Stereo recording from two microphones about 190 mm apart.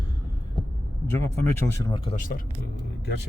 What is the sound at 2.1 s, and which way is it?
Speech, 45° left (ahead or behind).